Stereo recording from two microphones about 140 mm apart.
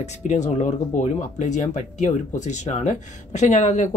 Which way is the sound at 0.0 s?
55° left (ahead or behind).